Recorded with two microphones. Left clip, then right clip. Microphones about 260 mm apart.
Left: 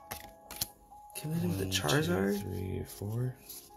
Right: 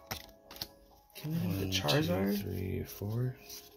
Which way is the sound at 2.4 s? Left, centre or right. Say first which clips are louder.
Even; centre.